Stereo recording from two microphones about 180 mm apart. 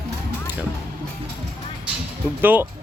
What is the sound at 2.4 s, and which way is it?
Speech, 10° right (ahead or behind).